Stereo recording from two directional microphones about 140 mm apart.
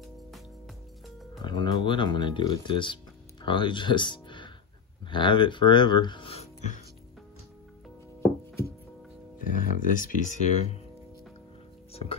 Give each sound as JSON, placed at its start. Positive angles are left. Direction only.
{"t": 1.4, "sound": "speech", "side_deg": 35}
{"t": 8.2, "sound": "music", "side_deg": 20}
{"t": 9.6, "sound": "speech", "side_deg": 75}
{"t": 11.9, "sound": "music", "side_deg": 45}